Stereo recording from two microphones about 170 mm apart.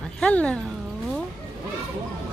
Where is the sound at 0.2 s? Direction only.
5° left (ahead or behind).